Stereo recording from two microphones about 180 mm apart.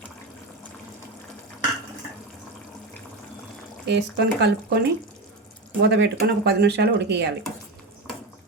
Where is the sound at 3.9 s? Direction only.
70° right (ahead or behind).